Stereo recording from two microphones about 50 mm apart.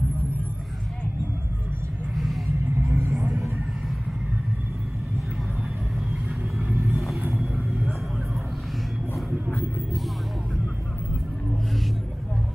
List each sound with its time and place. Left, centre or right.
2.1 s vehicle: centre
2.7 s vehicle: right
3.1 s vehicle: right
6.7 s vehicle: right